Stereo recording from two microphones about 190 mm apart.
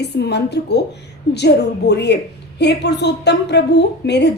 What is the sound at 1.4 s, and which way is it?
A woman's voice, 60° left (ahead or behind).